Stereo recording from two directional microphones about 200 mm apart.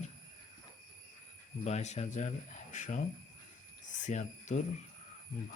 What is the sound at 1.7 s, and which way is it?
Speech, 35° left (ahead or behind).